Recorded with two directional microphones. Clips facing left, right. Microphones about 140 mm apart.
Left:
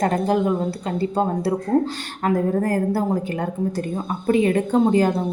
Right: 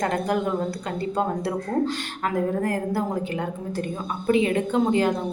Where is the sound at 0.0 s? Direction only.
35° left (ahead or behind).